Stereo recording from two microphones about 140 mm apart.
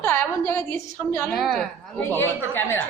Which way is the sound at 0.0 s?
20° left (ahead or behind).